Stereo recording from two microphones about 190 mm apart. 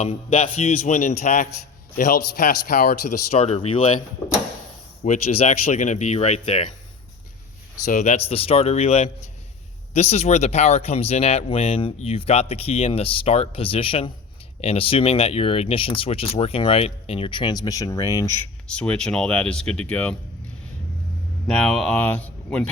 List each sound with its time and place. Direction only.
0.0 s a man's voice: 35° left (ahead or behind); by 2.9 s 50° left (ahead or behind)
3.3 s speech: 35° left (ahead or behind)
5.0 s speech: 35° left (ahead or behind)
7.9 s speech: 40° left (ahead or behind); by 18.3 s 15° left (ahead or behind)
18.7 s speech: 5° left (ahead or behind)
21.4 s speech: centre (ahead or behind)